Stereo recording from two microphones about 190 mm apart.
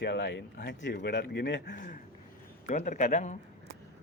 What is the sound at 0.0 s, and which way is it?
Speech, 65° left (ahead or behind).